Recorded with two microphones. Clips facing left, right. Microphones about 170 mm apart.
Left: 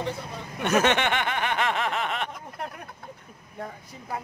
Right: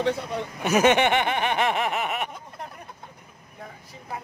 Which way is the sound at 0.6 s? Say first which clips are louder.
Right 3 dB; 10° right (ahead or behind).